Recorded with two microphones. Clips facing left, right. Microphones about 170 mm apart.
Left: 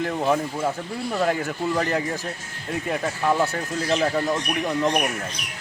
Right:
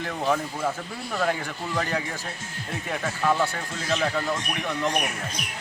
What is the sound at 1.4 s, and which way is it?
Speech, 40° left (ahead or behind).